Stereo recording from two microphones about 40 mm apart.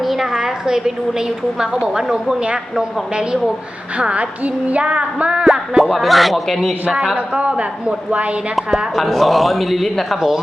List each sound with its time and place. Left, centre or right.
0.0 s a sound: centre
2.0 s a woman's voice: centre
3.9 s a woman's voice: right
5.5 s a woman's voice: centre
6.8 s a woman's voice: centre
7.3 s a woman's voice: right
8.5 s a woman's voice: centre
10.2 s a woman's voice: centre